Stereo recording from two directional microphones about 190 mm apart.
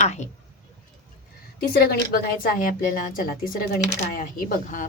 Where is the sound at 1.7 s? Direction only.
55° left (ahead or behind).